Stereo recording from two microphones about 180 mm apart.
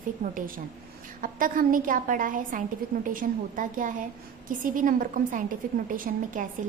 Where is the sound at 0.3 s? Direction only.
50° right (ahead or behind).